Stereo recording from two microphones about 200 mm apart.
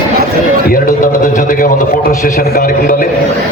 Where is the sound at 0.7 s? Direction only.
45° left (ahead or behind).